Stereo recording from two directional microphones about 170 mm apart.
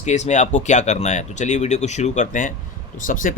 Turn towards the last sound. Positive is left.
turn(degrees=50)  # may be behind; listen again after turning